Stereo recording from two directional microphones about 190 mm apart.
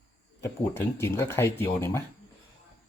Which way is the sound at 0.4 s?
15° left (ahead or behind).